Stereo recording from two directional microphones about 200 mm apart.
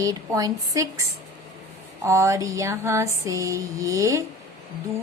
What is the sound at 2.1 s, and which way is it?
A woman's voice, 15° right (ahead or behind).